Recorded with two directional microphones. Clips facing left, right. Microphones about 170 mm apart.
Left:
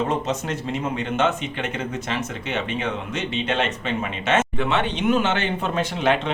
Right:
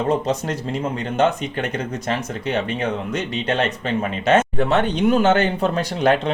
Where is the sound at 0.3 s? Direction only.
35° right (ahead or behind).